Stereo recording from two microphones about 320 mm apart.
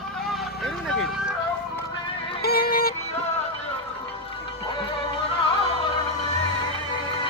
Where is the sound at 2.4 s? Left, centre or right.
Left.